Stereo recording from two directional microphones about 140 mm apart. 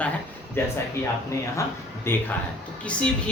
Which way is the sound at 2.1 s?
15° left (ahead or behind).